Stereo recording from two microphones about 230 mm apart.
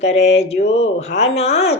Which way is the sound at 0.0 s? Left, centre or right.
Left.